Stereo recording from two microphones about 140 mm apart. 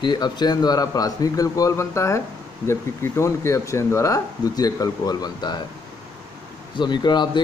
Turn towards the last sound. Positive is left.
turn(degrees=35)  # may be behind; listen again after turning